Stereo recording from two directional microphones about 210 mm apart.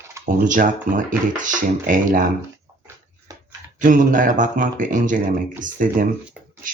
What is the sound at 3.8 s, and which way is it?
Speech, 40° right (ahead or behind).